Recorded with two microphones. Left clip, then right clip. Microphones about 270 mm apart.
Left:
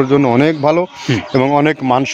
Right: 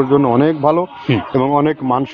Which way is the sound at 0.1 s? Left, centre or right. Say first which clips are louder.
Left 1 dB; left.